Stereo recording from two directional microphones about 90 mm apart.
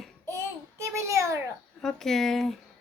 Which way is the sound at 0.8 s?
30° right (ahead or behind).